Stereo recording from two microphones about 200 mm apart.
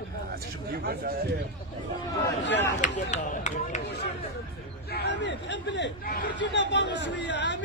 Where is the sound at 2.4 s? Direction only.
60° left (ahead or behind).